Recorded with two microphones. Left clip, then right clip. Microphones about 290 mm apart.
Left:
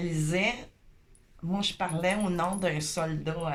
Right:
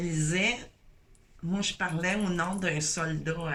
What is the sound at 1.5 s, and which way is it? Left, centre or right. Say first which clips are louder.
Speech: left 1 dB; centre.